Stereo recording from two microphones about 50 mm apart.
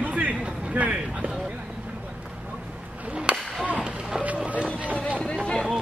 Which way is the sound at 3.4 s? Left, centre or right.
Centre.